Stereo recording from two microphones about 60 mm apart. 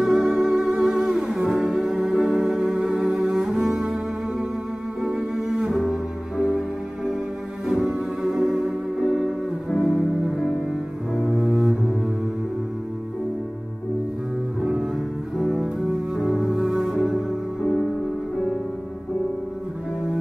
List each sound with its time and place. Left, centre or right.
0.0 s music: centre
5.0 s cello: centre
5.7 s cello: centre
7.6 s cello: centre
9.0 s music: centre
11.3 s cello: centre
14.6 s double bass: centre
15.3 s cello: centre